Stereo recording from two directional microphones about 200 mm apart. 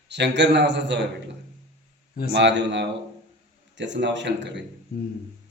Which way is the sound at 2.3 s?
60° right (ahead or behind).